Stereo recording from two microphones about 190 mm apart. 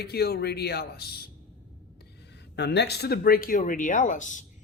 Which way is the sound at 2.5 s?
60° left (ahead or behind).